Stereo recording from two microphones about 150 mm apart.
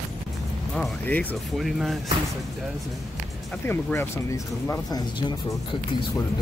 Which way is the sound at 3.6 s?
15° left (ahead or behind).